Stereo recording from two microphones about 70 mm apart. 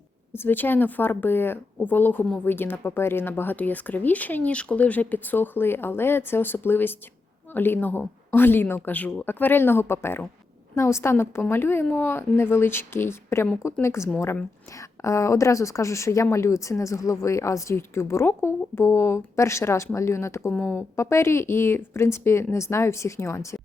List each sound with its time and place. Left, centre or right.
0.3 s speech: left